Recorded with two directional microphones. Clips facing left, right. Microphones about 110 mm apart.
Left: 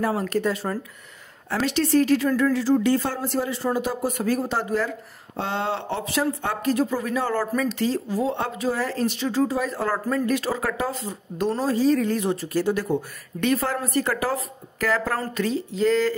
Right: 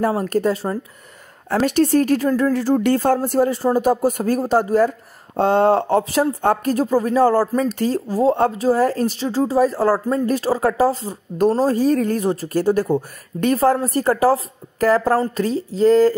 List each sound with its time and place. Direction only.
0.0 s a woman's voice: 40° right (ahead or behind)
2.2 s a woman's voice: 35° right (ahead or behind)
2.5 s a woman's voice: 50° right (ahead or behind)